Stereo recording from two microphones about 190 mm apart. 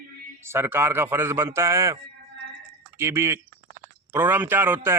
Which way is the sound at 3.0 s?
15° right (ahead or behind).